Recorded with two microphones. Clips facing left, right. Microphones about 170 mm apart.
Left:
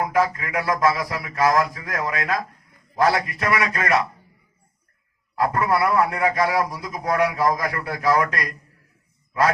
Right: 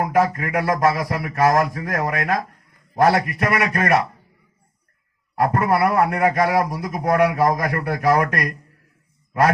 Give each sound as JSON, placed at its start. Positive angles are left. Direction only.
{"t": 0.0, "sound": "a man's voice", "side_deg": -45}
{"t": 5.5, "sound": "a man's voice", "side_deg": -45}